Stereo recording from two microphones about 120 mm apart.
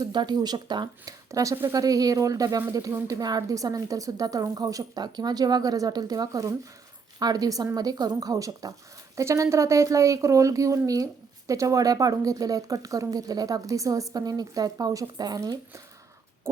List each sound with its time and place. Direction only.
0.0 s a woman's voice: 35° right (ahead or behind)